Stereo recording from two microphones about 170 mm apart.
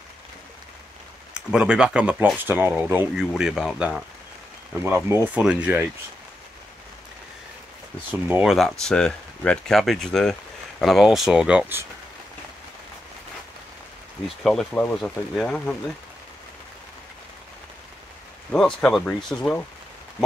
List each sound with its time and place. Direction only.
1.5 s speech: 5° right (ahead or behind)
4.8 s speech: 15° right (ahead or behind)
8.3 s speech: 5° right (ahead or behind)
14.4 s speech: centre (ahead or behind)
18.5 s speech: 5° left (ahead or behind)